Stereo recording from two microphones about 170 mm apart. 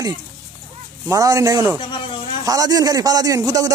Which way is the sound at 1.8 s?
30° left (ahead or behind).